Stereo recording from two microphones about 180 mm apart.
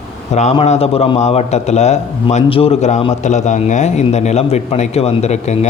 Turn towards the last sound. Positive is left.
turn(degrees=40)  # may be behind; listen again after turning